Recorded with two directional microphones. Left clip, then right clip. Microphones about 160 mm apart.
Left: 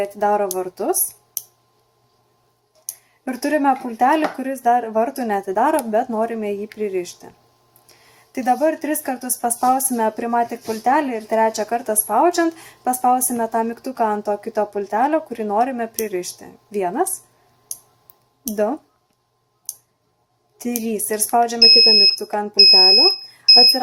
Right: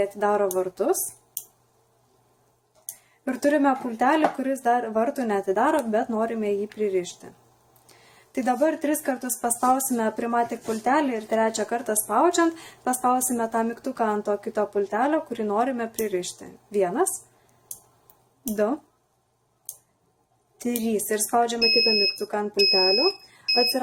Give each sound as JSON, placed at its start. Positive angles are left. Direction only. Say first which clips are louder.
{"t": 0.0, "sound": "speech", "louder": "left 4 dB", "side_deg": 20}
{"t": 3.2, "sound": "speech", "louder": "left 3 dB", "side_deg": 25}
{"t": 8.4, "sound": "speech", "louder": "left 5 dB", "side_deg": 20}
{"t": 18.5, "sound": "speech", "louder": "left 4 dB", "side_deg": 20}
{"t": 20.6, "sound": "speech", "louder": "left 2 dB", "side_deg": 25}